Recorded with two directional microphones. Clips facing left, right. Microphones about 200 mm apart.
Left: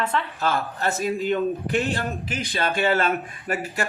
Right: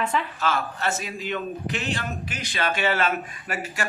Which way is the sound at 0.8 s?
35° left (ahead or behind).